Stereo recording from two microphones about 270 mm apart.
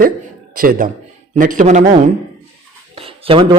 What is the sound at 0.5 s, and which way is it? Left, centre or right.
A man's voice, right.